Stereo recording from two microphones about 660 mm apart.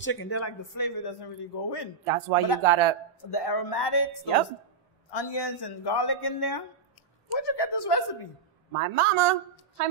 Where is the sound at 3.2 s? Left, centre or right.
Left.